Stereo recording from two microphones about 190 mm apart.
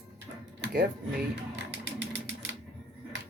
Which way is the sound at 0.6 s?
55° right (ahead or behind).